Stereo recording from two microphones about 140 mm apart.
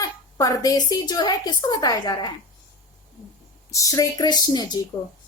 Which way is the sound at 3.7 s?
25° left (ahead or behind).